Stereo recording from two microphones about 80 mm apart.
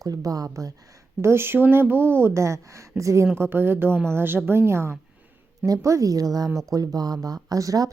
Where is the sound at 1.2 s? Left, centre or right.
Right.